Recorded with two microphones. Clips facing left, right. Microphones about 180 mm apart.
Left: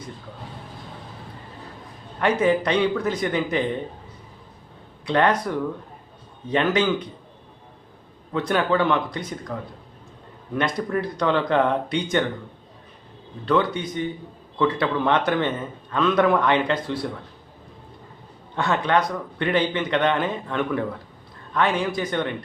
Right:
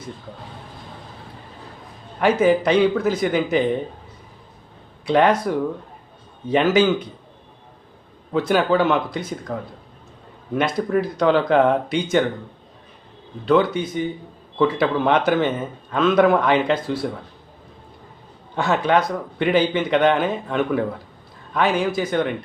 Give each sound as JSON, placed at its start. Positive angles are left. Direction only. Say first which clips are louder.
{"t": 2.1, "sound": "a man's voice", "louder": "right 3 dB", "side_deg": -5}
{"t": 5.0, "sound": "a man's voice", "louder": "right 4 dB", "side_deg": -10}
{"t": 8.3, "sound": "a man's voice", "louder": "right 3 dB", "side_deg": -5}
{"t": 10.6, "sound": "a man's voice", "louder": "right 4 dB", "side_deg": -5}
{"t": 13.7, "sound": "a man's voice", "louder": "right 3 dB", "side_deg": -5}
{"t": 18.5, "sound": "a man's voice", "louder": "right 3 dB", "side_deg": -5}